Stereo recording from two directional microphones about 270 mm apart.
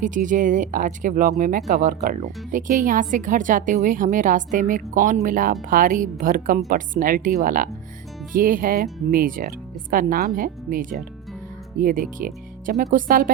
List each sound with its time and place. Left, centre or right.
0.0 s speech: right